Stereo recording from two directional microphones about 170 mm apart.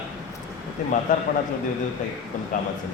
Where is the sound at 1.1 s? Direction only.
50° left (ahead or behind).